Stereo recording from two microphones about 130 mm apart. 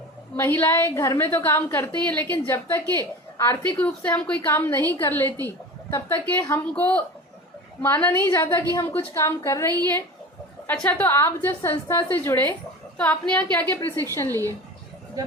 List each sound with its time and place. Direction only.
0.3 s a woman's voice: 15° left (ahead or behind)